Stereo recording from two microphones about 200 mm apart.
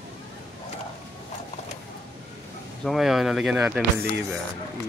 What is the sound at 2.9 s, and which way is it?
Speech, centre (ahead or behind).